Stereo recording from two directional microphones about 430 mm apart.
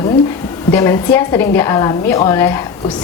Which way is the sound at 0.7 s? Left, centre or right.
Centre.